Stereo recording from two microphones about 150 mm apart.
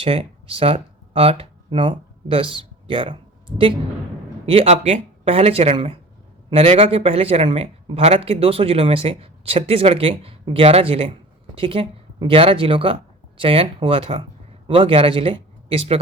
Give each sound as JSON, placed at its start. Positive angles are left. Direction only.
{"t": 0.0, "sound": "a man's voice", "side_deg": -40}